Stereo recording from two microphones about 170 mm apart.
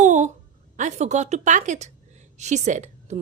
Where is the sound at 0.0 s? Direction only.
45° right (ahead or behind).